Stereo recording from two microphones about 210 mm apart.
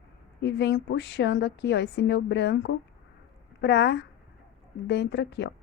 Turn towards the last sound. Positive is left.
turn(degrees=55)  # may be behind; listen again after turning